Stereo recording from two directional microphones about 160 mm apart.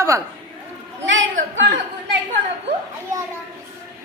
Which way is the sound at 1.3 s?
55° right (ahead or behind).